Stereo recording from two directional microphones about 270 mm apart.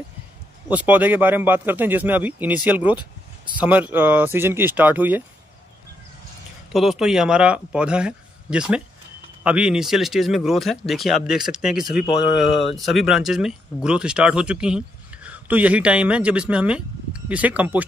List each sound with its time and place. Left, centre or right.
0.7 s speech: centre
6.7 s speech: centre
11.9 s speech: left
12.7 s speech: centre